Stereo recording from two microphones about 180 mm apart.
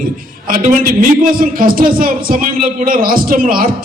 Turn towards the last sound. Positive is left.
turn(degrees=-50)  # may be behind; listen again after turning